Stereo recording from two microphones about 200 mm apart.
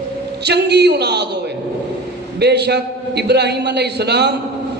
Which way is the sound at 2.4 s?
55° right (ahead or behind).